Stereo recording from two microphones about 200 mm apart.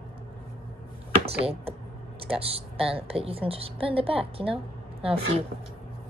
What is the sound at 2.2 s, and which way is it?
A woman's voice, 30° right (ahead or behind).